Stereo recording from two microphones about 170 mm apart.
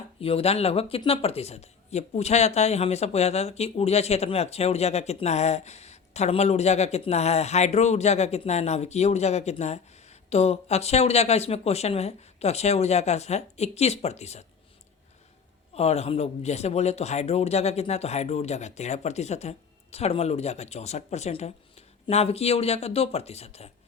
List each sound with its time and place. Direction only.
0.2 s speech: 35° left (ahead or behind)
15.7 s speech: 40° left (ahead or behind)